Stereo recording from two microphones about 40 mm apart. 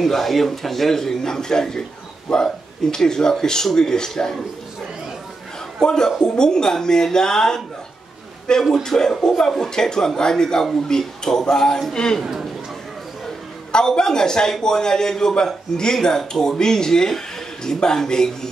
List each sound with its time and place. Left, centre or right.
0.0 s a man's voice: centre
5.8 s a man's voice: centre
12.2 s speech: centre
13.7 s a man's voice: centre